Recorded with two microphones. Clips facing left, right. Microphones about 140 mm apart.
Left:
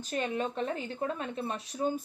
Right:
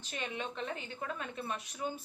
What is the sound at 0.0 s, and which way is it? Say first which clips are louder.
Speech: left 8 dB; 40° left (ahead or behind).